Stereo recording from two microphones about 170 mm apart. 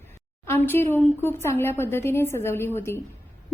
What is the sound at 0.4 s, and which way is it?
A woman's voice, 15° left (ahead or behind).